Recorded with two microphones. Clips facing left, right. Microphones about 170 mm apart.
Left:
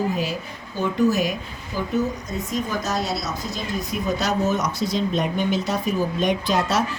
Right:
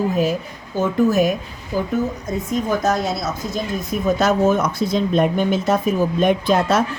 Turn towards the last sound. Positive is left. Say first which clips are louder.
# right 5 dB
turn(degrees=-55)  # may be behind; listen again after turning